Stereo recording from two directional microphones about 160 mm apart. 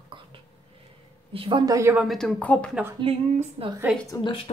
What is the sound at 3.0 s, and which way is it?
Speech, 40° right (ahead or behind).